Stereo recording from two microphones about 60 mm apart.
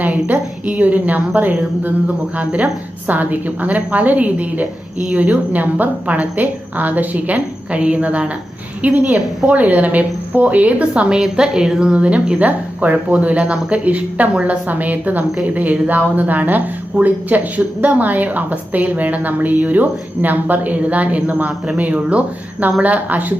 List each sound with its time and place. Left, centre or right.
0.0 s a woman's voice: right
11.2 s a woman's voice: centre; by 23.2 s right